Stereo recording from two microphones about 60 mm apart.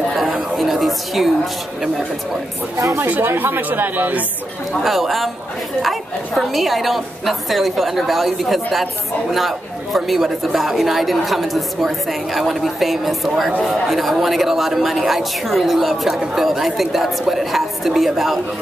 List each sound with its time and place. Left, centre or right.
0.1 s a sound: centre
3.0 s speech: right
4.8 s a man's voice: centre
9.9 s a man's voice: centre